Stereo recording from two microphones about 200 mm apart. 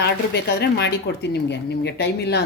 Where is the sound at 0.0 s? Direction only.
55° left (ahead or behind).